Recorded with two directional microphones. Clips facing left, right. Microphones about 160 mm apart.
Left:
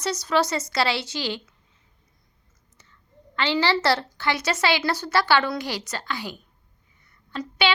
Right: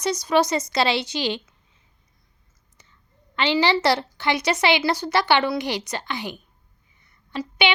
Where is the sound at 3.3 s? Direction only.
15° right (ahead or behind).